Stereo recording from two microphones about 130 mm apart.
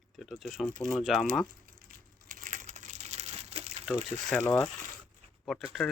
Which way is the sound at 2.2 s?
85° right.